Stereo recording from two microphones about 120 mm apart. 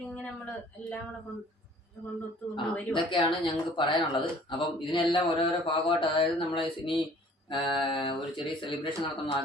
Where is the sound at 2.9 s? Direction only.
45° left (ahead or behind).